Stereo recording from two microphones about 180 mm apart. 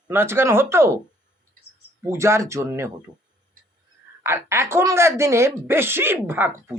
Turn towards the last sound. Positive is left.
turn(degrees=-15)  # may be behind; listen again after turning